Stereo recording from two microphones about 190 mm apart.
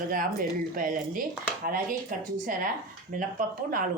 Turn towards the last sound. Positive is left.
turn(degrees=-45)  # may be behind; listen again after turning